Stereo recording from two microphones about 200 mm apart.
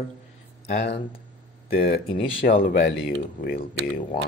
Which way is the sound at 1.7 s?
50° left (ahead or behind).